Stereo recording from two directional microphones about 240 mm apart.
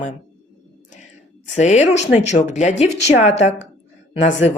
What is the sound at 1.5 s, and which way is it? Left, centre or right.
Speech, left.